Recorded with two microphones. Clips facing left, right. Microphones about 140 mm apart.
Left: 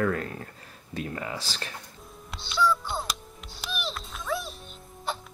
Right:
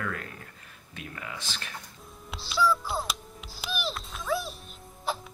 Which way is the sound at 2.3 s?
Centre (ahead or behind).